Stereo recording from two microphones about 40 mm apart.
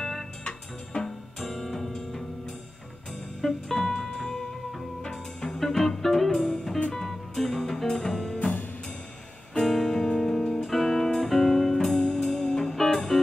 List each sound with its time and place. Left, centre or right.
0.4 s music: left
1.4 s music: centre
3.3 s music: centre
5.6 s music: centre
9.6 s music: centre